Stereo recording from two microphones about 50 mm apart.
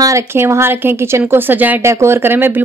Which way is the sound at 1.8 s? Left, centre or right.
Right.